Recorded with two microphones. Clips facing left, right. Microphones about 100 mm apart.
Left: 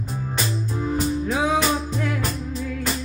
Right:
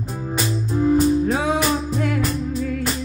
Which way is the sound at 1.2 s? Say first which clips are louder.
Right 2 dB; 50° right (ahead or behind).